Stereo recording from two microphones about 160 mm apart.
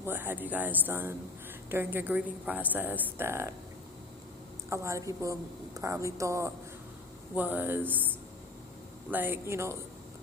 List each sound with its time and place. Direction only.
0.0 s a woman's voice: 10° right (ahead or behind)
4.7 s a woman's voice: 20° right (ahead or behind)
9.0 s a woman's voice: 10° right (ahead or behind)